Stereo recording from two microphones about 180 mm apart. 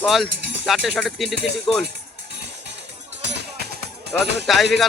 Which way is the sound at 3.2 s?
65° right (ahead or behind).